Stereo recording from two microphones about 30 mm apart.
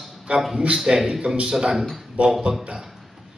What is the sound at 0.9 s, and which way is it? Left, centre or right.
Speech, right.